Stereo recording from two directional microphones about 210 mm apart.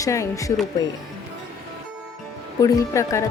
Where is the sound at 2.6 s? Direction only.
15° left (ahead or behind).